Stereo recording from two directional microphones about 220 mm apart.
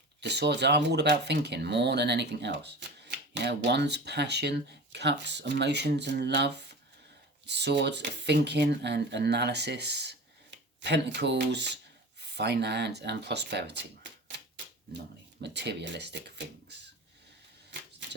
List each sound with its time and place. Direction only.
0.2 s speech: 50° right (ahead or behind)